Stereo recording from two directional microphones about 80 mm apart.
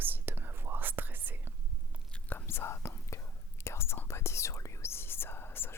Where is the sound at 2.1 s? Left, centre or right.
Left.